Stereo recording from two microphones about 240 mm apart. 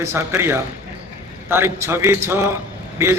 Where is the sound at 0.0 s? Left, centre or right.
Centre.